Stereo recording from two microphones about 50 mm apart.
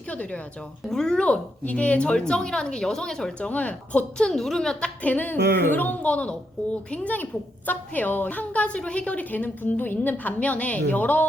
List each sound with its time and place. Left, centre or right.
0.1 s speech: left
0.9 s speech: centre
1.2 s speech: left
3.5 s a woman's voice: left
4.2 s speech: centre
5.0 s a woman's voice: left
6.0 s a woman's voice: left
10.4 s a woman's voice: left